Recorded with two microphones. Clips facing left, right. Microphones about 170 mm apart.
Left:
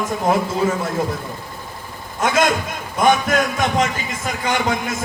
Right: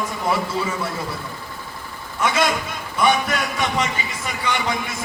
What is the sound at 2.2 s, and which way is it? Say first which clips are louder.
A man's voice: left 3 dB; 45° left (ahead or behind).